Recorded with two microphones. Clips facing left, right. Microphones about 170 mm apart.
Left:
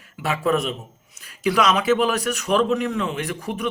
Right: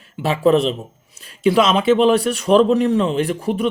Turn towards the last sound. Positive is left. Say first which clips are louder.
# right 8 dB
turn(degrees=-30)  # may be behind; listen again after turning